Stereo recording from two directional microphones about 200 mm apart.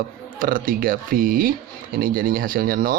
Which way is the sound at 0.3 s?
45° right (ahead or behind).